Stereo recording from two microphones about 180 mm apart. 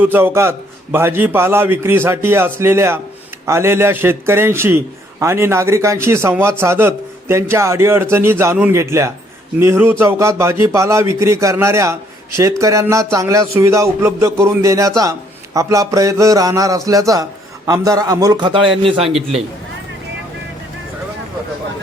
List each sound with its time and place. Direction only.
0.0 s a man's voice: 10° right (ahead or behind); by 19.0 s 30° right (ahead or behind)
19.0 s a man's voice: centre (ahead or behind)